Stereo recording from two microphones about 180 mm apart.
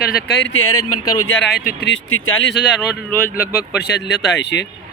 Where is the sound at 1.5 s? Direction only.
65° left (ahead or behind); by 2.6 s 90° left.